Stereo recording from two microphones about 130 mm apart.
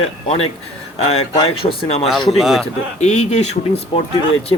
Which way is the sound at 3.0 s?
60° left (ahead or behind).